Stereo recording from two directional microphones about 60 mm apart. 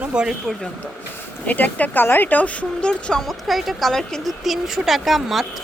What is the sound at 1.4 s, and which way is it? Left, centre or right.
Speech, left.